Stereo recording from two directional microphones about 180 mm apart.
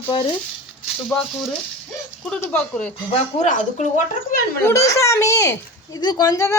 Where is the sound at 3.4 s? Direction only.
40° left (ahead or behind).